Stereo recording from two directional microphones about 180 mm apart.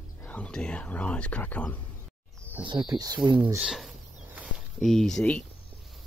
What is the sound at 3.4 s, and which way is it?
Speech, 5° right (ahead or behind).